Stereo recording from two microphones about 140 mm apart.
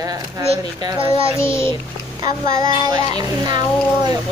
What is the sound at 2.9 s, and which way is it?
Child singing, 30° right (ahead or behind).